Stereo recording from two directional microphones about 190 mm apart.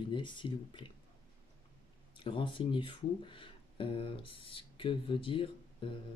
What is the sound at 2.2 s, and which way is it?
Speech, 25° left (ahead or behind).